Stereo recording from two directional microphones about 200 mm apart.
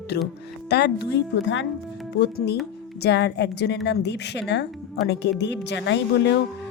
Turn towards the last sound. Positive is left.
turn(degrees=60)  # may be behind; listen again after turning